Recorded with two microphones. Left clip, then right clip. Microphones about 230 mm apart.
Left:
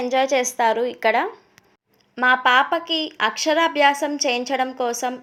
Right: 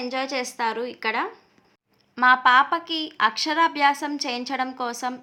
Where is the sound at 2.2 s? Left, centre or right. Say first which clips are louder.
Even; right.